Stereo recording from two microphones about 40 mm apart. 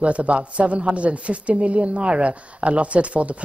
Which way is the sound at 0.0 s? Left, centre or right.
Right.